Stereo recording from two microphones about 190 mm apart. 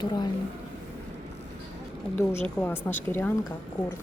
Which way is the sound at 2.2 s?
10° left (ahead or behind).